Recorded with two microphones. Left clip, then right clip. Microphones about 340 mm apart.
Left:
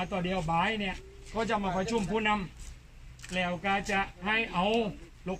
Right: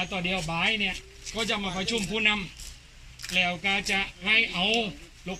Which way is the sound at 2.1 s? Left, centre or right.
Centre.